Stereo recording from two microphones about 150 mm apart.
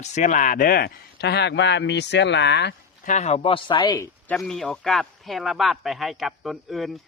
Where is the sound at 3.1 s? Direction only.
50° left (ahead or behind).